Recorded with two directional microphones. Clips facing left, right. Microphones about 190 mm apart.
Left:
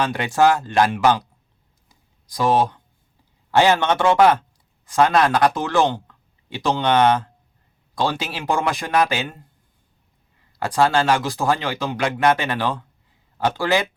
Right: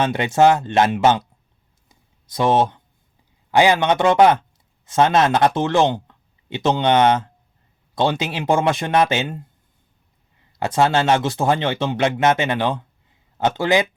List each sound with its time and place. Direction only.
0.0 s speech: 20° right (ahead or behind)
1.9 s a sound: 25° right (ahead or behind)
3.5 s speech: 15° right (ahead or behind)
10.6 s speech: 20° right (ahead or behind)